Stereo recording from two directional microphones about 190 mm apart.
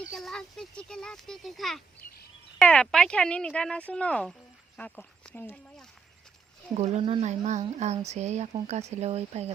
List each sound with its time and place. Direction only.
0.1 s speech: centre (ahead or behind)
6.7 s speech: 35° right (ahead or behind)